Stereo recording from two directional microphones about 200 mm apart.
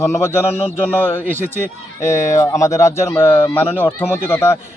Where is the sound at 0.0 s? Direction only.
15° left (ahead or behind).